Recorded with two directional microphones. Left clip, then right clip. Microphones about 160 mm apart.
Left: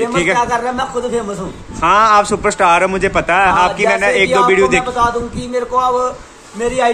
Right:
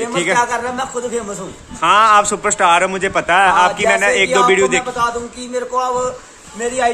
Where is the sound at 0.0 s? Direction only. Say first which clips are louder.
Left 2 dB; 5° right (ahead or behind).